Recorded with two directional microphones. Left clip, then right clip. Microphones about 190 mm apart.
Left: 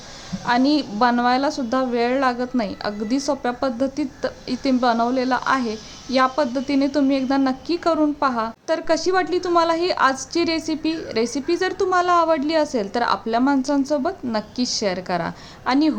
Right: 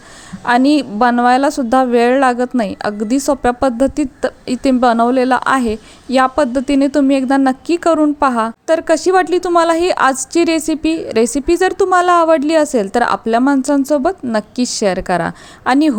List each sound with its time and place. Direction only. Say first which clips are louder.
0.4 s a woman's voice: right 7 dB; 40° right (ahead or behind)